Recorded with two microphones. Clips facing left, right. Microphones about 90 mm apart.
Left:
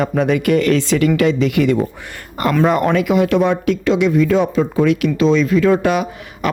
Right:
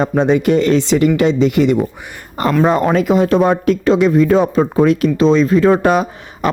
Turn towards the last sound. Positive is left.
turn(degrees=-35)  # may be behind; listen again after turning